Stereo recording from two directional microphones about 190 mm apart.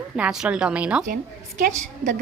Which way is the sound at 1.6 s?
40° right (ahead or behind).